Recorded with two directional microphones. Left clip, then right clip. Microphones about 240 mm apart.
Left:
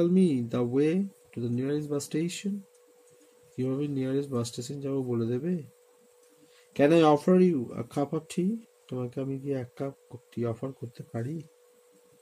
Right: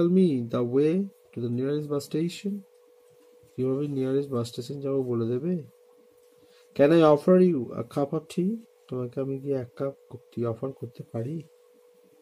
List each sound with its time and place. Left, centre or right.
0.0 s speech: centre
3.5 s speech: centre
6.7 s speech: right